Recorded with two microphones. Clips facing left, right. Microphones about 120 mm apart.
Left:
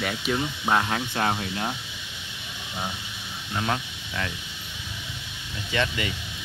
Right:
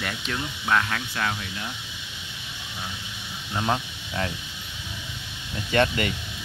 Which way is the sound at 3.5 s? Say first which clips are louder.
Right 2 dB; 20° right (ahead or behind).